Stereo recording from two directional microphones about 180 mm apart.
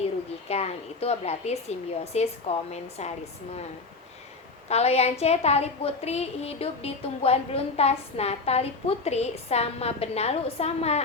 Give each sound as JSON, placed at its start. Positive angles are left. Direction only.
{"t": 0.4, "sound": "a woman's voice", "side_deg": 35}
{"t": 4.7, "sound": "a woman's voice", "side_deg": 35}